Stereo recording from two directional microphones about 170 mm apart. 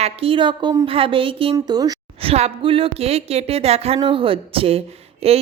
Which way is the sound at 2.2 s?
35° right (ahead or behind).